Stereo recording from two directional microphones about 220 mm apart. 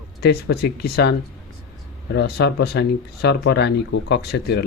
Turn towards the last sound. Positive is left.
turn(degrees=50)  # may be behind; listen again after turning